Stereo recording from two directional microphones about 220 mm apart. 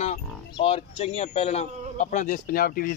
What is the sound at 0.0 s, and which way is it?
Speech, 30° left (ahead or behind).